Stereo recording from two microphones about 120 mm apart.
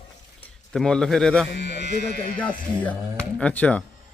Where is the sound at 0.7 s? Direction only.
5° left (ahead or behind).